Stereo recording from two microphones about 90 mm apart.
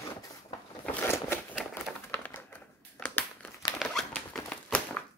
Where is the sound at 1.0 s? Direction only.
25° left (ahead or behind).